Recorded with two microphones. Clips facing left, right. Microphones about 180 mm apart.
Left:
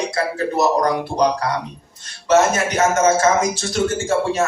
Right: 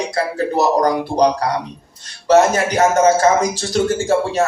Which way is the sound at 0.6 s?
35° right (ahead or behind).